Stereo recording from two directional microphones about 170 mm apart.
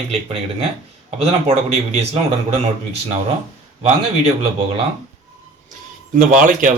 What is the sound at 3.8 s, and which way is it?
Speech, 35° right (ahead or behind).